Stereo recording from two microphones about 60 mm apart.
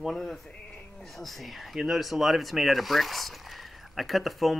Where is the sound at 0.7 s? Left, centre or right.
Centre.